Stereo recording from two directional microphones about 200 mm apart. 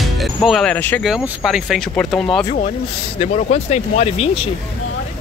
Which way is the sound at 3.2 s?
30° left (ahead or behind).